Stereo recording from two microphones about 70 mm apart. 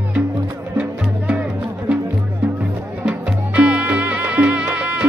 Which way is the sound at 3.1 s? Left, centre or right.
Centre.